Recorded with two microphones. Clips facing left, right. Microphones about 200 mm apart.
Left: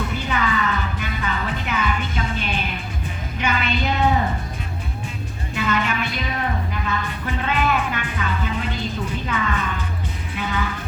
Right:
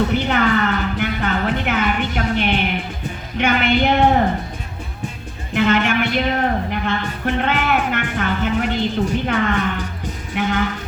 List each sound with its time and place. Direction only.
0.0 s music: 70° right (ahead or behind)
3.3 s a woman's voice: 70° right (ahead or behind)
5.5 s a woman's voice: 70° right (ahead or behind)